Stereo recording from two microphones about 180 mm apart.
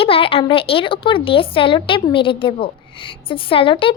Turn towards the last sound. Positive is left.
turn(degrees=30)  # may be behind; listen again after turning